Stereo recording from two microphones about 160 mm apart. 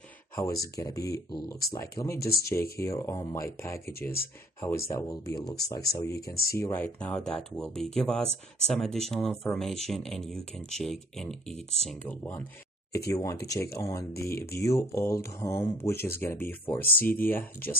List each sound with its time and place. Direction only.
0.4 s speech: 20° left (ahead or behind)